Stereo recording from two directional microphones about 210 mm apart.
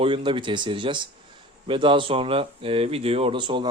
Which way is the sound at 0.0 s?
25° right (ahead or behind).